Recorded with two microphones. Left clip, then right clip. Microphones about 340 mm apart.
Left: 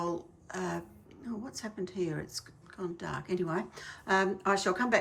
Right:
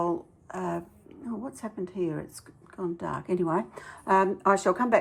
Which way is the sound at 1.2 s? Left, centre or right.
Centre.